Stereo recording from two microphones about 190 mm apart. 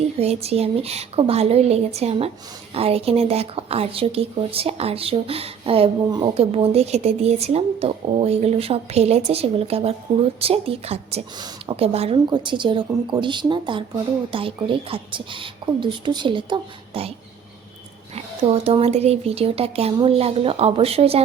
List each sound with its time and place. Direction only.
0.2 s speech: 35° right (ahead or behind)